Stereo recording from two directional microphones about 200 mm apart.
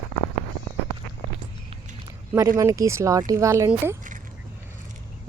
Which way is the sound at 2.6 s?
15° right (ahead or behind).